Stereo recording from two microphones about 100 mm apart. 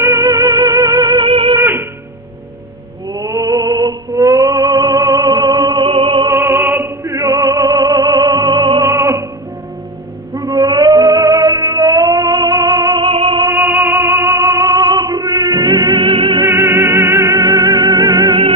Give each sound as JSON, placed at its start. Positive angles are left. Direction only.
{"t": 0.0, "sound": "music", "side_deg": -25}
{"t": 0.3, "sound": "music", "side_deg": -40}
{"t": 1.3, "sound": "music", "side_deg": -65}
{"t": 1.5, "sound": "music", "side_deg": -25}
{"t": 3.1, "sound": "music", "side_deg": -35}
{"t": 5.9, "sound": "music", "side_deg": -60}
{"t": 6.3, "sound": "music", "side_deg": -25}
{"t": 8.8, "sound": "music", "side_deg": -30}
{"t": 10.3, "sound": "a sound", "side_deg": -40}
{"t": 10.8, "sound": "music", "side_deg": -40}
{"t": 13.0, "sound": "music", "side_deg": -65}
{"t": 13.5, "sound": "music", "side_deg": -25}
{"t": 16.4, "sound": "music", "side_deg": -25}